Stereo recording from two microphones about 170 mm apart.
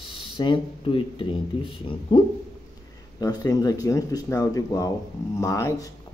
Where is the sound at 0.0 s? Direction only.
30° left (ahead or behind).